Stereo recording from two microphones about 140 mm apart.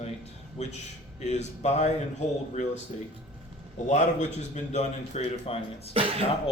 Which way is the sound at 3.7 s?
60° left (ahead or behind).